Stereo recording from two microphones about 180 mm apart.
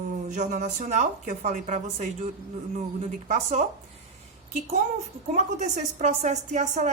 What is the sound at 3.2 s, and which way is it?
Speech, 40° right (ahead or behind).